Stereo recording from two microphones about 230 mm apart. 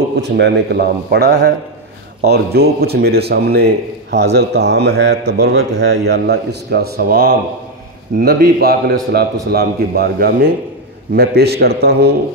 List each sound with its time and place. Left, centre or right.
0.2 s a man's voice: right